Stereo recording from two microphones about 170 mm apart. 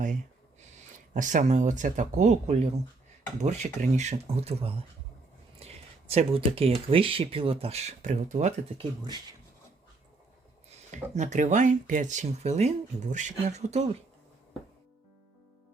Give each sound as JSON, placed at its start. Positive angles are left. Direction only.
{"t": 1.1, "sound": "speech", "side_deg": -50}
{"t": 5.5, "sound": "a sound", "side_deg": -35}
{"t": 6.8, "sound": "speech", "side_deg": -30}
{"t": 8.8, "sound": "speech", "side_deg": -25}
{"t": 10.7, "sound": "speech", "side_deg": -45}